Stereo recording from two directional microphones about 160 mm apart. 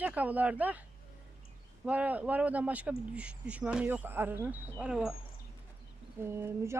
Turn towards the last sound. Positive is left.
turn(degrees=-15)  # may be behind; listen again after turning